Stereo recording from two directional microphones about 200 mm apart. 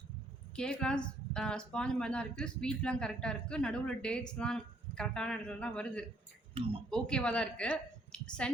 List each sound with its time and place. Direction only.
0.5 s speech: 5° left (ahead or behind)
6.6 s speech: 25° right (ahead or behind)
6.9 s a woman's voice: 5° left (ahead or behind)